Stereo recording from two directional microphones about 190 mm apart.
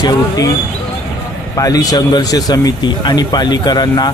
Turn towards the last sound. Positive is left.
turn(degrees=20)  # may be behind; listen again after turning